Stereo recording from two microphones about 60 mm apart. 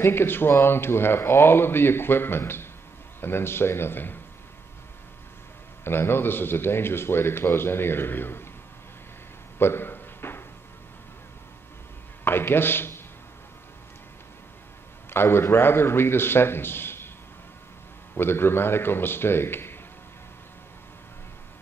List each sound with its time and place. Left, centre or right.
0.0 s speech: left
5.9 s speech: left
9.6 s a sound: left
12.3 s a man's voice: left
15.0 s a man's voice: left
18.1 s speech: left